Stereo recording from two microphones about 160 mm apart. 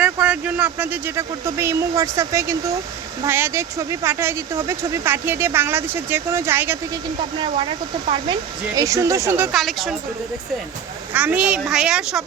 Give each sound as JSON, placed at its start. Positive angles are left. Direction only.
{"t": 0.0, "sound": "speech", "side_deg": -10}
{"t": 7.3, "sound": "speech", "side_deg": -30}
{"t": 8.7, "sound": "speech", "side_deg": -20}
{"t": 9.6, "sound": "a woman's voice", "side_deg": 0}
{"t": 11.1, "sound": "a woman's voice", "side_deg": -10}